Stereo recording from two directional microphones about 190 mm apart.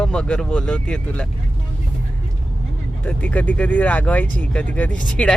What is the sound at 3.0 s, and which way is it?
Speech, 10° left (ahead or behind).